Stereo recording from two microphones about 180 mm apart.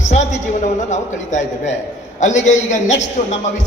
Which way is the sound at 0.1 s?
40° left (ahead or behind).